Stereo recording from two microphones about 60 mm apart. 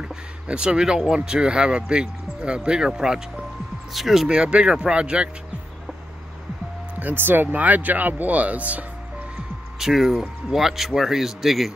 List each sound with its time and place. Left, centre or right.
0.0 s speech: centre
7.0 s speech: right
9.8 s speech: centre